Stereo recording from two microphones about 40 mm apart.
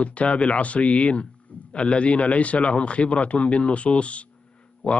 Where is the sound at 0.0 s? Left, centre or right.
Left.